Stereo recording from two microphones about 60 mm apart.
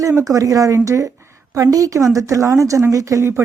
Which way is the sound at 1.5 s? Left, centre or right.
Right.